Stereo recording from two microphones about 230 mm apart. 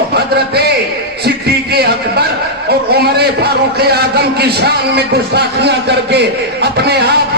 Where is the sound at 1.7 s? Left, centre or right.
Right.